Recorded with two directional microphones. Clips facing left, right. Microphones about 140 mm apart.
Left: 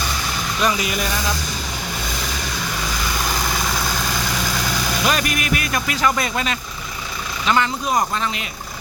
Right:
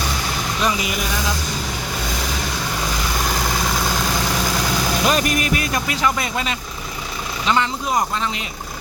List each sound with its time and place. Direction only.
0.6 s speech: 20° right (ahead or behind)
5.0 s speech: 35° right (ahead or behind)
5.7 s speech: 20° right (ahead or behind)